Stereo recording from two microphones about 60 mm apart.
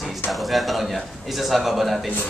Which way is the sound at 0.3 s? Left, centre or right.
Centre.